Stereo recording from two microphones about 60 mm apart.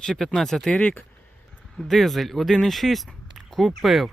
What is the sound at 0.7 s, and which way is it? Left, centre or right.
Speech, left.